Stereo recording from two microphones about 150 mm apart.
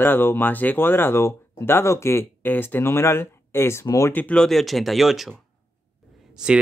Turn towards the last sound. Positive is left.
turn(degrees=-5)  # may be behind; listen again after turning